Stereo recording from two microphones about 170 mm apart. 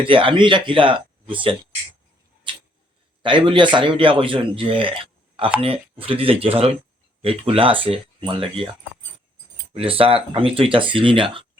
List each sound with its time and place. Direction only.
0.0 s speech: 30° right (ahead or behind)
3.2 s speech: 30° right (ahead or behind)
9.7 s speech: 35° right (ahead or behind)